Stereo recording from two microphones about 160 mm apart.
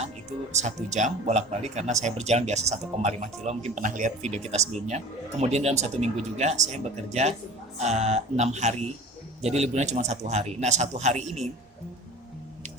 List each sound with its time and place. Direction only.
0.5 s speech: 45° right (ahead or behind)